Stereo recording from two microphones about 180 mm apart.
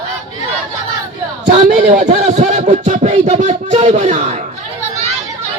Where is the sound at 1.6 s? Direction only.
45° right (ahead or behind).